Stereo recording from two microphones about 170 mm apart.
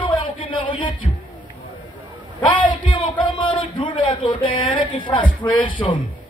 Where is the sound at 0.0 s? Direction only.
30° left (ahead or behind).